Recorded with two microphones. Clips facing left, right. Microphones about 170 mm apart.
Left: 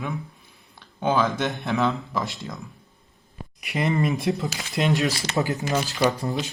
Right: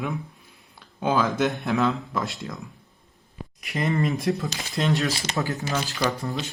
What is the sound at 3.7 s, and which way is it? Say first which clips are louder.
Speech: left 1 dB; 15° left (ahead or behind).